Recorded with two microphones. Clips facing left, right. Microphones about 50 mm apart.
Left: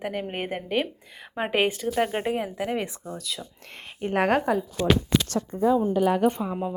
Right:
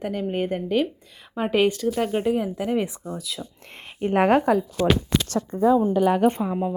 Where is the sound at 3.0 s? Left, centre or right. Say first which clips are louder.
Right 2 dB; centre.